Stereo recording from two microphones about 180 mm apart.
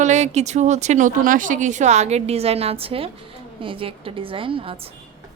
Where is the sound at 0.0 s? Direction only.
40° right (ahead or behind).